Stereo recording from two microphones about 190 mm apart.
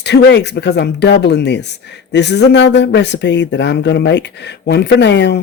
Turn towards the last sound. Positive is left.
turn(degrees=65)  # may be behind; listen again after turning